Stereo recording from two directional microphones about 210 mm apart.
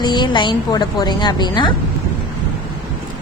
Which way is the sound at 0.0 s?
20° left (ahead or behind).